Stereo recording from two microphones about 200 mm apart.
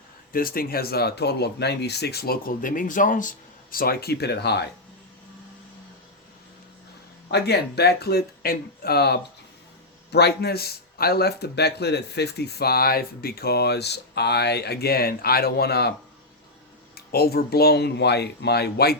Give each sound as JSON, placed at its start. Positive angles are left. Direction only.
{"t": 0.3, "sound": "speech", "side_deg": 45}
{"t": 7.3, "sound": "speech", "side_deg": 55}
{"t": 17.1, "sound": "speech", "side_deg": 50}